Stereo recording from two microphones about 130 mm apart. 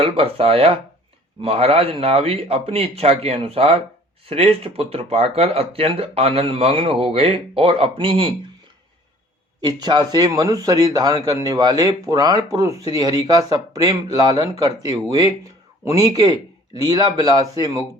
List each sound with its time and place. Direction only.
0.0 s speech: 50° right (ahead or behind)
9.6 s a man's voice: 35° right (ahead or behind)